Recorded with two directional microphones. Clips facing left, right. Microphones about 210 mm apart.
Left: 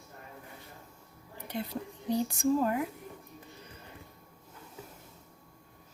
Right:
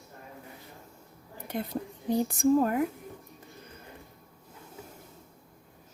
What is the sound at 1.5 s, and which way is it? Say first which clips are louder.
Speech: right 3 dB; 50° right (ahead or behind).